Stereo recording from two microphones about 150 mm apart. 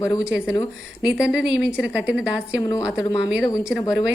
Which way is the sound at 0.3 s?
5° right (ahead or behind).